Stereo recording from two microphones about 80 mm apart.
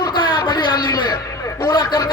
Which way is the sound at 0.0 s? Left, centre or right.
Left.